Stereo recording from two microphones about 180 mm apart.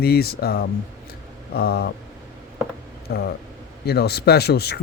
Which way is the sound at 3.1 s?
65° left (ahead or behind).